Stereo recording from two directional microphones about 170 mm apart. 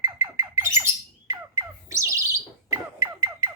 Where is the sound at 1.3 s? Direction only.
20° right (ahead or behind).